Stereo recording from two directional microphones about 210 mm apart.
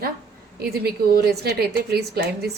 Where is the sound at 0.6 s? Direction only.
50° right (ahead or behind).